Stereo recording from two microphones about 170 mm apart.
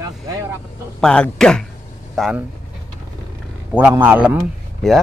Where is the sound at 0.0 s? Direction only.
20° right (ahead or behind).